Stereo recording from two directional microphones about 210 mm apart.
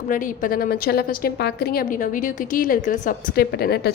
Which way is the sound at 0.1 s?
40° left (ahead or behind).